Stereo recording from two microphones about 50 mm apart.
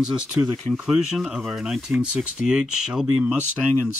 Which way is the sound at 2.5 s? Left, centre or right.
Centre.